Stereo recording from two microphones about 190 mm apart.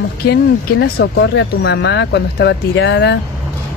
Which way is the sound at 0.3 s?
60° left (ahead or behind).